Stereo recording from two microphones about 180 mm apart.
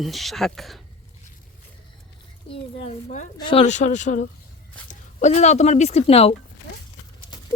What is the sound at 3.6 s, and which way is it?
Speech, 40° left (ahead or behind).